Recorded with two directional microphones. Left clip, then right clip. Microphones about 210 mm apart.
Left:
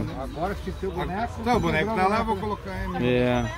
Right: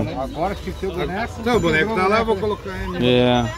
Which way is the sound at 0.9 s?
Centre (ahead or behind).